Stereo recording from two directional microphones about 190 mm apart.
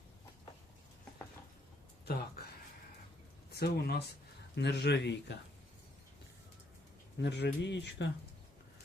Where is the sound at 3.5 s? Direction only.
55° left (ahead or behind).